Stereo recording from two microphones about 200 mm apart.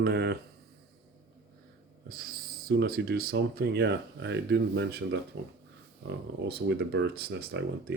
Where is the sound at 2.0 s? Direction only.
45° right (ahead or behind).